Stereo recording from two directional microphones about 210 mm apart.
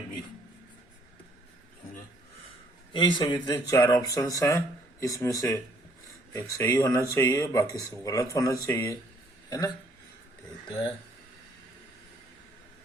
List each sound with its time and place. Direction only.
2.9 s speech: 20° left (ahead or behind)